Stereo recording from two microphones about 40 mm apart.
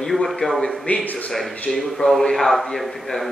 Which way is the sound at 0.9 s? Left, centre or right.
Left.